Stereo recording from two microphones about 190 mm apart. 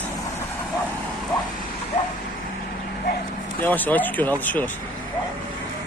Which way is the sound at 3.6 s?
10° left (ahead or behind).